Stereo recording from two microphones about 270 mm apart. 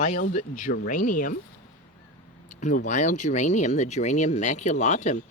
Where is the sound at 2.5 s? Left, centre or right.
Left.